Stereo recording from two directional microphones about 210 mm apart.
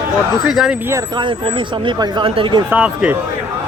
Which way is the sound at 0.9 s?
20° right (ahead or behind).